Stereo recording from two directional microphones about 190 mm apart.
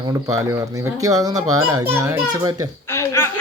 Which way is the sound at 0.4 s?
15° right (ahead or behind).